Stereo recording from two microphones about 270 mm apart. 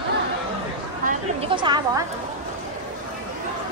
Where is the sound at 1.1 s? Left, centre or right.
Centre.